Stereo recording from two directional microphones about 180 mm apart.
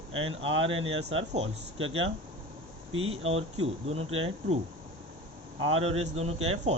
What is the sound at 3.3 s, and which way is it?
Speech, 35° right (ahead or behind).